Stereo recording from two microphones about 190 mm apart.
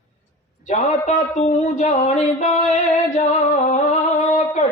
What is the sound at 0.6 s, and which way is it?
Speech, 40° left (ahead or behind).